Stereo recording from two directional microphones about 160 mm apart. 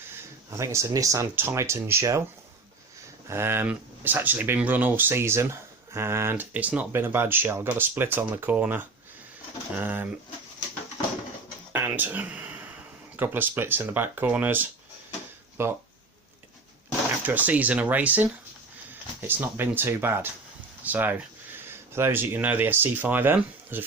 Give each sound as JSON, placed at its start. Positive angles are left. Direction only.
{"t": 0.1, "sound": "speech", "side_deg": -20}
{"t": 3.2, "sound": "speech", "side_deg": -15}
{"t": 11.7, "sound": "a sound", "side_deg": -10}
{"t": 13.1, "sound": "speech", "side_deg": -10}
{"t": 17.2, "sound": "speech", "side_deg": -10}